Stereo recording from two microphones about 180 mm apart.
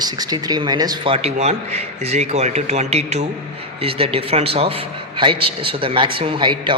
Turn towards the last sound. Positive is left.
turn(degrees=-25)  # may be behind; listen again after turning